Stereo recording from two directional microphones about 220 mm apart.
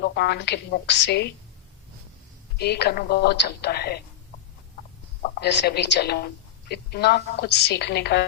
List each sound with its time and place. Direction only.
0.0 s a woman's voice: 50° left (ahead or behind)
2.6 s a woman's voice: 50° left (ahead or behind)
5.4 s a woman's voice: 50° left (ahead or behind)